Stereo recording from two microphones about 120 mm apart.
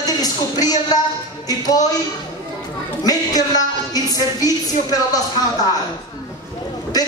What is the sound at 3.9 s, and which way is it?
A man's voice, 30° left (ahead or behind).